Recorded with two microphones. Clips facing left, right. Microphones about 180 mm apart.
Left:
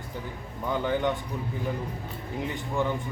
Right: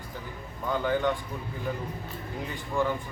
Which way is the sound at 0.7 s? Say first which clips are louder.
Even; 20° left (ahead or behind).